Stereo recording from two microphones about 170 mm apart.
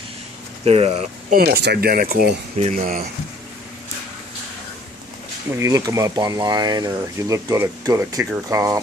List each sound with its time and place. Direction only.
0.7 s speech: 35° right (ahead or behind)
1.3 s speech: 70° right (ahead or behind)
2.5 s speech: 45° right (ahead or behind)
5.5 s speech: 20° right (ahead or behind)